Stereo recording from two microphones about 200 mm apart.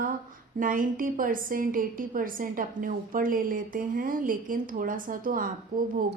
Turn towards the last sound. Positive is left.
turn(degrees=-45)  # may be behind; listen again after turning